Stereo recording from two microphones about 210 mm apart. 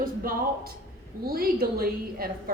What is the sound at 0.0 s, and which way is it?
Speech, 45° right (ahead or behind).